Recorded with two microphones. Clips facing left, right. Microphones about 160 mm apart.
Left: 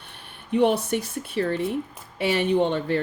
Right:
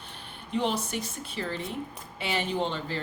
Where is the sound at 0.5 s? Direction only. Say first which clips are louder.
Left 8 dB; 60° left (ahead or behind).